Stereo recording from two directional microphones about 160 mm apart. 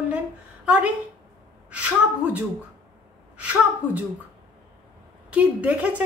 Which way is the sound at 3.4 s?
10° right (ahead or behind).